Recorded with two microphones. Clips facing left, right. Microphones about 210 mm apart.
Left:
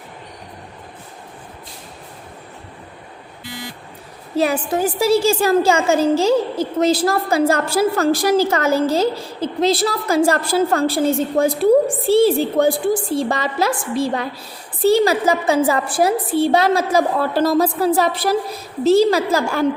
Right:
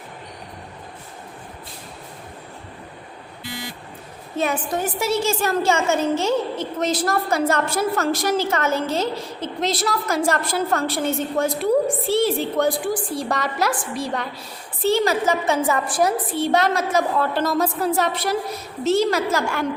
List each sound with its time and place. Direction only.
4.4 s a woman's voice: 35° left (ahead or behind)